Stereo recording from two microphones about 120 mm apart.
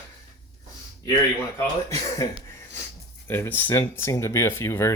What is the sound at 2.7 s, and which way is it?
Speech, 20° left (ahead or behind).